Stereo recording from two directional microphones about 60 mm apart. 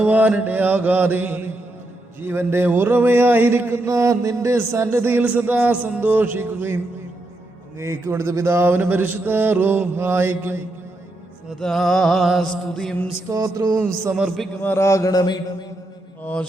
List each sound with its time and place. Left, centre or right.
0.0 s mantra: right
3.8 s mantra: right
4.5 s mantra: right
7.8 s mantra: right
11.6 s music: centre
13.2 s mantra: right
14.3 s a man's voice: centre
14.8 s mantra: left
16.2 s mantra: left